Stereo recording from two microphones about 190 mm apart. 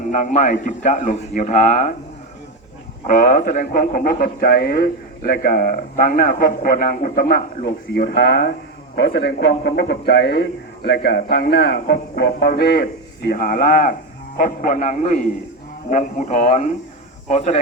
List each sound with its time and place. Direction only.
0.1 s a man's voice: 40° left (ahead or behind)
3.1 s a man's voice: 45° left (ahead or behind)